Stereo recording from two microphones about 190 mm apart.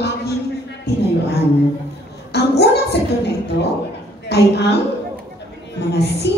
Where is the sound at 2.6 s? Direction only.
60° left (ahead or behind).